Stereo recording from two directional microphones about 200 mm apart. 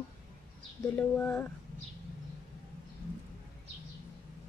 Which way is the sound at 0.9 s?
5° left (ahead or behind).